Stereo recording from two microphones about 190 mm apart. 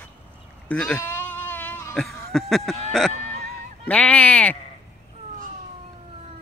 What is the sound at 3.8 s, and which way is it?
Speech, 5° left (ahead or behind).